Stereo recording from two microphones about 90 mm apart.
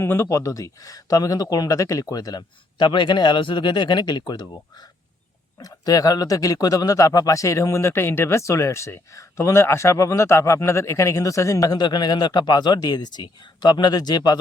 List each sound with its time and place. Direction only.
0.0 s speech: 30° left (ahead or behind)
11.8 s speech: 55° left (ahead or behind)